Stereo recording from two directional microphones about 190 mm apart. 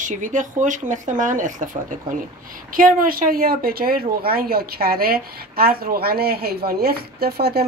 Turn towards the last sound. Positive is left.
turn(degrees=-55)  # may be behind; listen again after turning